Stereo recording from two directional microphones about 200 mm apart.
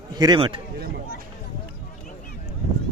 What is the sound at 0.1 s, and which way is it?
Speech, 20° right (ahead or behind).